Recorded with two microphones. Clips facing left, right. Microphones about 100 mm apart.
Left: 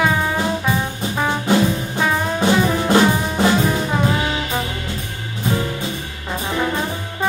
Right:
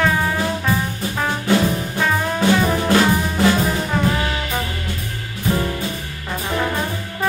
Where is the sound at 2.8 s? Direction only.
20° left (ahead or behind).